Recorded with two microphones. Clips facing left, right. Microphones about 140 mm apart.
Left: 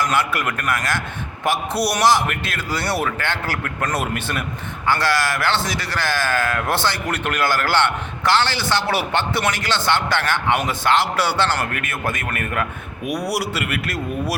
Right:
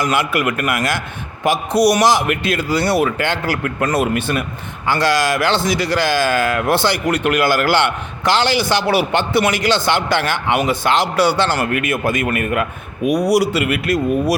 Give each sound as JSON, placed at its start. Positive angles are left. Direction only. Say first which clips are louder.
{"t": 0.0, "sound": "a man's voice", "louder": "right 3 dB", "side_deg": -15}
{"t": 13.1, "sound": "a man's voice", "louder": "right 8 dB", "side_deg": -90}
{"t": 13.3, "sound": "a man's voice", "louder": "right 8 dB", "side_deg": -15}